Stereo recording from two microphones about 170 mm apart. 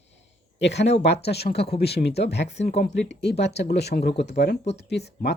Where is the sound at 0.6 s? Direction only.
90° left.